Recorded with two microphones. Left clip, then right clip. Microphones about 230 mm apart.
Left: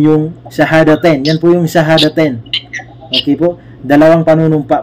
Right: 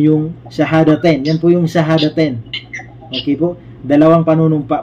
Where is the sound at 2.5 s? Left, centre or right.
Left.